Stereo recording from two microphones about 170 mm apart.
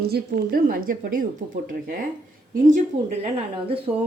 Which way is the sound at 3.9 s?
15° right (ahead or behind).